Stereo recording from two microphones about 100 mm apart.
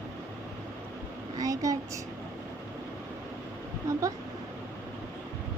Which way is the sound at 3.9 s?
30° right (ahead or behind).